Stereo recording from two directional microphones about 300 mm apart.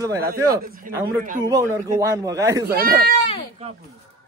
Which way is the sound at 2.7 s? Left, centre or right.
Right.